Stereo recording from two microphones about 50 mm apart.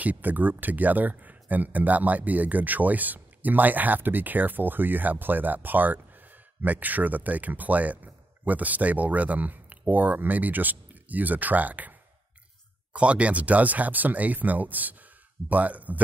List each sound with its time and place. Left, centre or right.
0.0 s speech: right